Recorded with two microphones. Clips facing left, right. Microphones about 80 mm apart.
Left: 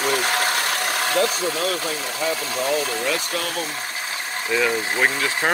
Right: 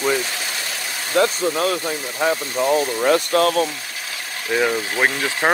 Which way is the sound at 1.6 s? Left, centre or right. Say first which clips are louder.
Right 3 dB; right.